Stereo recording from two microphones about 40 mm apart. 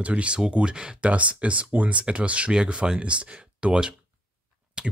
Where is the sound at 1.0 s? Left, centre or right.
Right.